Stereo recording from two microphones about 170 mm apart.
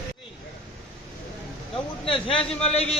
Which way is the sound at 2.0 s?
30° left (ahead or behind).